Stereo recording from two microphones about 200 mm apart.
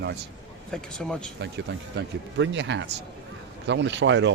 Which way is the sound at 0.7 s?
5° left (ahead or behind).